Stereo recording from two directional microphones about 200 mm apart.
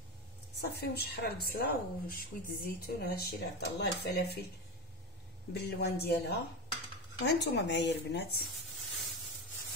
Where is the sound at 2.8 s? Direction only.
50° left (ahead or behind).